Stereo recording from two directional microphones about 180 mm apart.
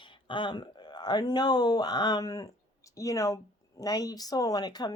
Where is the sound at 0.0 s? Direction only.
25° left (ahead or behind).